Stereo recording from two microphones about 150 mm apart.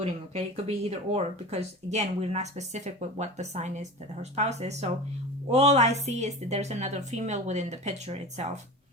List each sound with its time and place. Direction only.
0.5 s speech: 45° right (ahead or behind)